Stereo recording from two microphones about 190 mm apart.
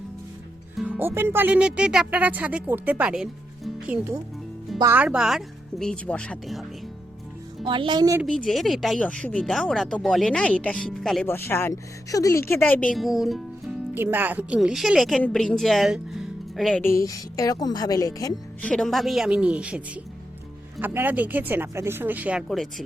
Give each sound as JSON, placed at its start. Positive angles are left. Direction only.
{"t": 0.8, "sound": "speech", "side_deg": -10}
{"t": 7.6, "sound": "speech", "side_deg": -25}
{"t": 8.2, "sound": "speech", "side_deg": 0}
{"t": 16.8, "sound": "a woman's voice", "side_deg": 15}
{"t": 18.6, "sound": "speech", "side_deg": 5}